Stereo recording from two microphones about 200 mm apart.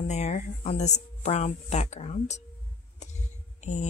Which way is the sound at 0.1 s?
35° left (ahead or behind).